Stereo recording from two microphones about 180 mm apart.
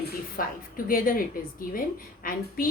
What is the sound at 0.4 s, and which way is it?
Speech, 50° left (ahead or behind).